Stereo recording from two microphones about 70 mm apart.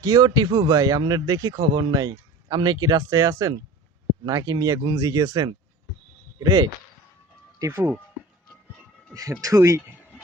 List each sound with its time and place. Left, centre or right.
0.0 s speech: right
3.0 s speech: right
4.3 s speech: right
9.1 s speech: right